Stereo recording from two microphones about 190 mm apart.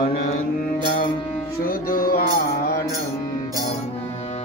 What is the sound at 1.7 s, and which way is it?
Music, 50° left (ahead or behind).